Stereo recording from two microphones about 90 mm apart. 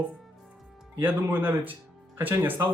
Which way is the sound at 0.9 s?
20° right (ahead or behind).